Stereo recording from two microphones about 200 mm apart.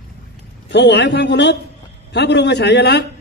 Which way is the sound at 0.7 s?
60° left (ahead or behind).